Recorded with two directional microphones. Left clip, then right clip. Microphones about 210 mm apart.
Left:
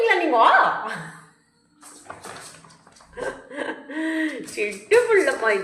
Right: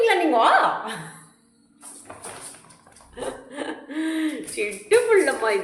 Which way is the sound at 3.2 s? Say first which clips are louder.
Left 2 dB; 10° right (ahead or behind).